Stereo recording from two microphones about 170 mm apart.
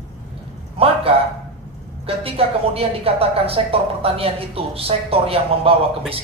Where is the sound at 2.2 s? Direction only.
35° right (ahead or behind).